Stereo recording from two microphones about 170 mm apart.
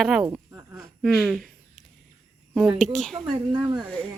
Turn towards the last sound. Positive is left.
turn(degrees=5)  # may be behind; listen again after turning